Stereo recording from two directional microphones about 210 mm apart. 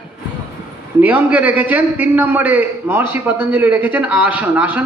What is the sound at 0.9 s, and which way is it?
A man's voice, 10° right (ahead or behind).